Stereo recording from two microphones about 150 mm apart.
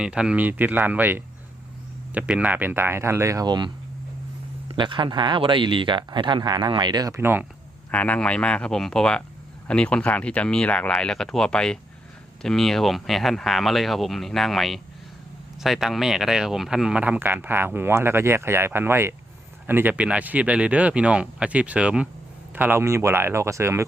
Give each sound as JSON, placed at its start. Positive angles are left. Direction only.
{"t": 0.0, "sound": "speech", "side_deg": -5}
{"t": 4.7, "sound": "speech", "side_deg": -35}
{"t": 7.9, "sound": "speech", "side_deg": 10}